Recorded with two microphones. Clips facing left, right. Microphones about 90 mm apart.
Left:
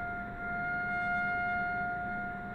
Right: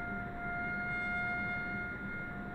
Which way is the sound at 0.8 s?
20° left (ahead or behind).